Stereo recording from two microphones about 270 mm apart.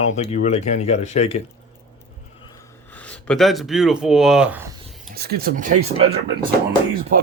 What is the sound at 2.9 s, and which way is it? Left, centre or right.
Speech, centre.